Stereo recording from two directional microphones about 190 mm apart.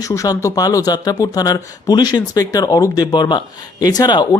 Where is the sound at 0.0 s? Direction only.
20° left (ahead or behind).